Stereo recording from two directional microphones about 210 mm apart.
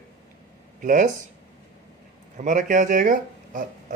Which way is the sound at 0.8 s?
40° right (ahead or behind).